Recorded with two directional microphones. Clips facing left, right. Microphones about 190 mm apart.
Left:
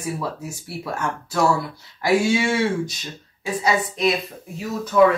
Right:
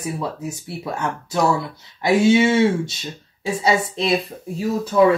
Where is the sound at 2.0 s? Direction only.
20° right (ahead or behind).